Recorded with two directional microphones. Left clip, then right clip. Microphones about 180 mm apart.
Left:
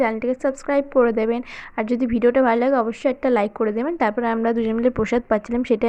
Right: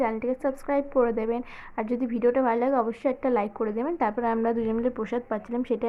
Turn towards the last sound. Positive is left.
turn(degrees=25)  # may be behind; listen again after turning